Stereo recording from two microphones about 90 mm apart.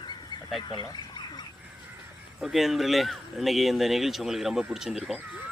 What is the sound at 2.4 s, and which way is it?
Speech, 5° right (ahead or behind).